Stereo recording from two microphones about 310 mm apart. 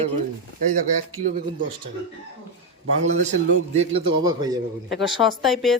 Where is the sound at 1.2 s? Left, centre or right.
Right.